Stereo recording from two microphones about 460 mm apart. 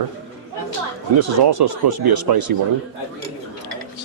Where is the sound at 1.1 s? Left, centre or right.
Right.